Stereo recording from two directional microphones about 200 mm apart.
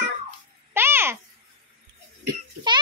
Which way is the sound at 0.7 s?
10° right (ahead or behind).